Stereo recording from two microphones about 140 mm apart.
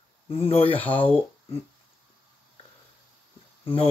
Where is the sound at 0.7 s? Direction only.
10° left (ahead or behind).